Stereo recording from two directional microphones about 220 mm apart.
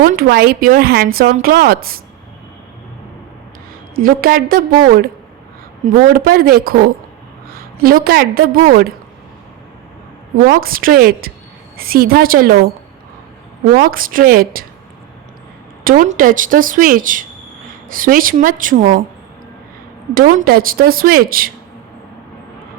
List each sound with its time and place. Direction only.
0.0 s a woman's voice: 40° right (ahead or behind)
3.9 s a woman's voice: 40° right (ahead or behind)
10.4 s a woman's voice: 40° right (ahead or behind)
13.7 s speech: 40° right (ahead or behind)
15.8 s speech: 40° right (ahead or behind)
20.1 s speech: 40° right (ahead or behind)